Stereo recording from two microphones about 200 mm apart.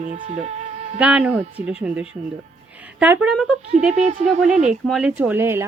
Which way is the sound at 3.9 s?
35° right (ahead or behind).